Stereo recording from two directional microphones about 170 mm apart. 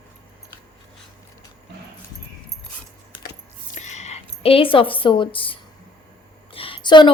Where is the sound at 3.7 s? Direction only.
45° left (ahead or behind).